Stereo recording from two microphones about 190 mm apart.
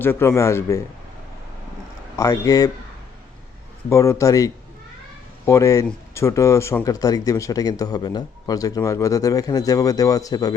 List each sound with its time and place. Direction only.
0.0 s speech: 10° left (ahead or behind)
2.1 s speech: 15° left (ahead or behind)
3.8 s speech: 15° left (ahead or behind)